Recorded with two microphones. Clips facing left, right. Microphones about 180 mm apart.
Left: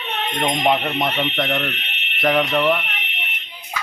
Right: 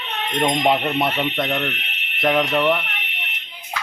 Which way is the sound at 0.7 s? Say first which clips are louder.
Right 1 dB; 5° right (ahead or behind).